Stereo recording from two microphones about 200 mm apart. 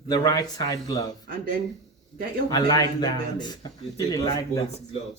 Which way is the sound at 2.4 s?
20° left (ahead or behind).